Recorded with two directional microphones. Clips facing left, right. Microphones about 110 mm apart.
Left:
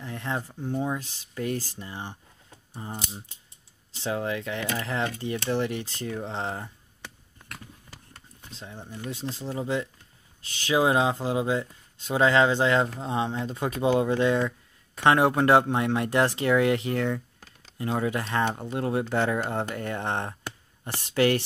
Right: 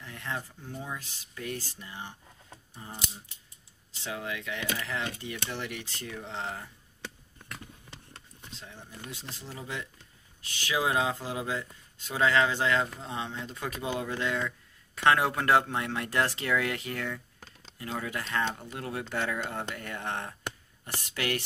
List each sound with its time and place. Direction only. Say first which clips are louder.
0.0 s speech: left 6 dB; 30° left (ahead or behind)
2.9 s speech: left 5 dB; 45° left (ahead or behind)
3.9 s speech: left 7 dB; 35° left (ahead or behind)
8.5 s speech: left 7 dB; 30° left (ahead or behind)